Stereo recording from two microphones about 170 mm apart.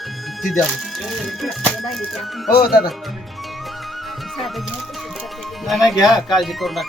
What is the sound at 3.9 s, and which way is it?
Speech, centre (ahead or behind).